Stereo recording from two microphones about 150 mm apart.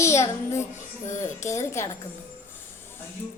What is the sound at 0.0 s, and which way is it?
A child's voice, 20° left (ahead or behind).